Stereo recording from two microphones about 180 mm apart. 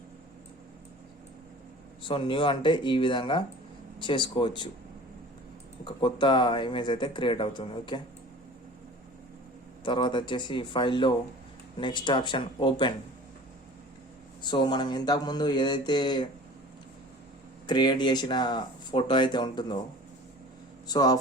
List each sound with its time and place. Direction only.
2.0 s speech: 30° left (ahead or behind)
5.8 s speech: 25° left (ahead or behind)
9.8 s speech: 25° left (ahead or behind)
14.4 s speech: 25° left (ahead or behind)
17.7 s speech: 25° left (ahead or behind)
20.8 s speech: 20° left (ahead or behind)